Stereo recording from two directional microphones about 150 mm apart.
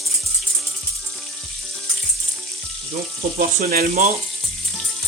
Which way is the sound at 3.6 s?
65° right (ahead or behind).